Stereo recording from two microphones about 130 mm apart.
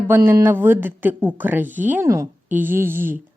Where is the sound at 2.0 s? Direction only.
25° right (ahead or behind).